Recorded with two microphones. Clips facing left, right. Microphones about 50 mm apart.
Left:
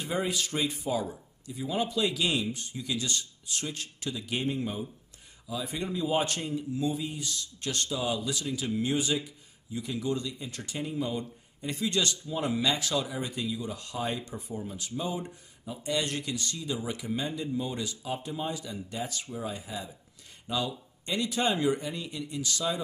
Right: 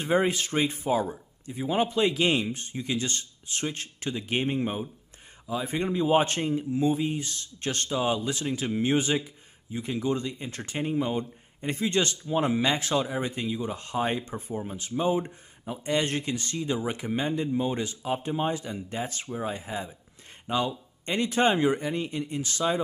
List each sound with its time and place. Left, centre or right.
0.0 s speech: right